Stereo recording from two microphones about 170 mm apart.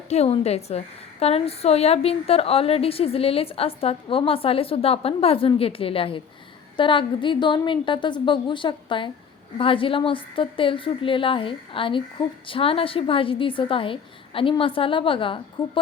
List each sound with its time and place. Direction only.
0.1 s a woman's voice: 40° left (ahead or behind)